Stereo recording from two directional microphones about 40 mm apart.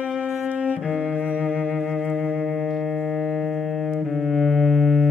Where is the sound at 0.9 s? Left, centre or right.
Right.